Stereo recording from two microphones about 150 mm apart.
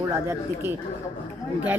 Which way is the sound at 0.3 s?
15° right (ahead or behind).